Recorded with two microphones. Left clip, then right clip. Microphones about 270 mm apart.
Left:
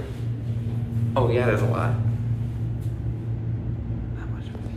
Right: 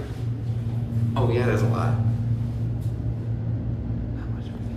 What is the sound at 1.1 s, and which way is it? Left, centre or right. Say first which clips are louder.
Speech: left 3 dB; centre.